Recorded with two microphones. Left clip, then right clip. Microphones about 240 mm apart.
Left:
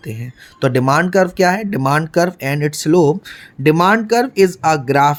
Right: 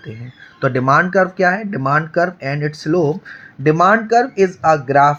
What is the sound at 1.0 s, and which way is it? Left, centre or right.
Speech, left.